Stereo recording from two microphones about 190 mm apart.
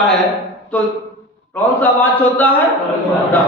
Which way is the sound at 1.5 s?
10° left (ahead or behind).